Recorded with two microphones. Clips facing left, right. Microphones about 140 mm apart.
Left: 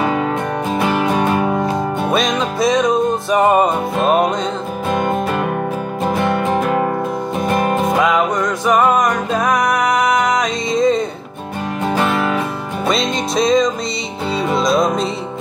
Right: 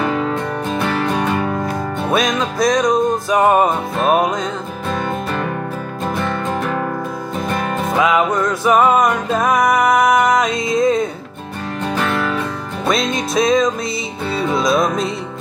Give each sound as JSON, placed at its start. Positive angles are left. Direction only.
{"t": 0.7, "sound": "music", "side_deg": 15}
{"t": 2.1, "sound": "music", "side_deg": 0}
{"t": 4.9, "sound": "music", "side_deg": 15}
{"t": 7.9, "sound": "music", "side_deg": 0}
{"t": 11.9, "sound": "music", "side_deg": 15}
{"t": 12.8, "sound": "music", "side_deg": 0}